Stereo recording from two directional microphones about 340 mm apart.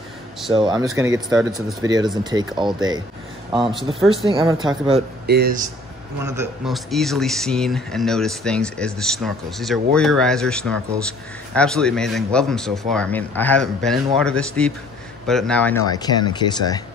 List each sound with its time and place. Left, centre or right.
0.5 s speech: centre
5.2 s speech: right
6.2 s speech: centre